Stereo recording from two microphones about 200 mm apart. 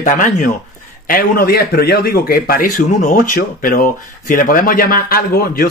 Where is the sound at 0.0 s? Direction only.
40° left (ahead or behind).